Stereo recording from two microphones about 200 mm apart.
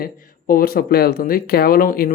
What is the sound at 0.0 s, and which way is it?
Speech, 45° left (ahead or behind).